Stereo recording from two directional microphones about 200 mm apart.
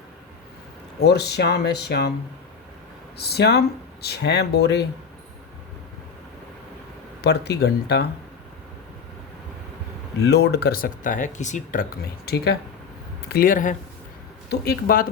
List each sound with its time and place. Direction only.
0.9 s speech: 55° left (ahead or behind)
3.2 s speech: 55° left (ahead or behind)
7.2 s speech: 55° left (ahead or behind)
10.2 s speech: 55° left (ahead or behind)
14.5 s speech: 50° left (ahead or behind)